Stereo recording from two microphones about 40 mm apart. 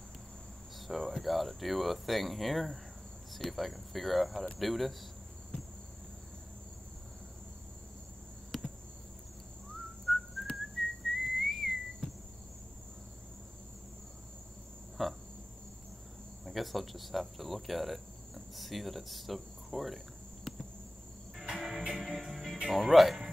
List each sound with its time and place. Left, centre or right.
0.7 s speech: centre
9.8 s whistling: centre
15.0 s a sound: centre
16.4 s speech: centre
20.5 s cricket: centre
21.4 s music: centre
22.7 s speech: centre